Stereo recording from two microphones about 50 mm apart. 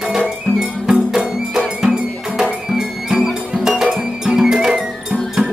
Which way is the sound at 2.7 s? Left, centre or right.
Centre.